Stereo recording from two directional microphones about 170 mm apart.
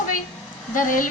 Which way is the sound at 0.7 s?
50° left (ahead or behind).